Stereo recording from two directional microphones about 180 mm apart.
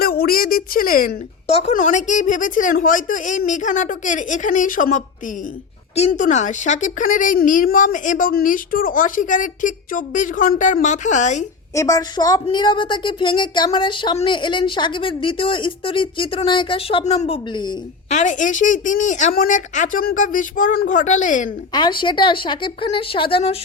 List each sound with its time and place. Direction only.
0.0 s a sound: 55° left (ahead or behind)
1.5 s a woman's voice: 35° left (ahead or behind)
11.7 s a woman's voice: 20° left (ahead or behind)
18.1 s a woman's voice: 40° left (ahead or behind)
21.7 s a woman's voice: 25° left (ahead or behind)